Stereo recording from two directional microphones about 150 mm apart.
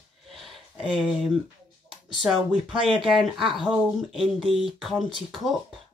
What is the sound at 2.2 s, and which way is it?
Speech, centre (ahead or behind).